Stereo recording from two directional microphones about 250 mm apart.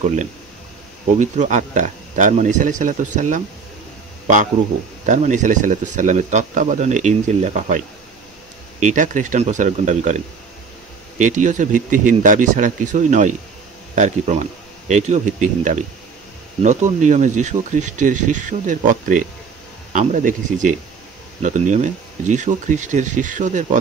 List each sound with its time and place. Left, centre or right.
1.1 s speech: right
5.0 s speech: right